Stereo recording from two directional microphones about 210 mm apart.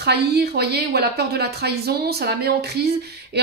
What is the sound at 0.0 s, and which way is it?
A woman's voice, 50° right (ahead or behind).